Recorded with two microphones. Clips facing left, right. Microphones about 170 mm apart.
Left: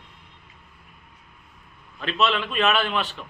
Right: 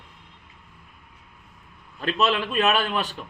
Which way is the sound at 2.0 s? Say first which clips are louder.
Right 1 dB; 40° right (ahead or behind).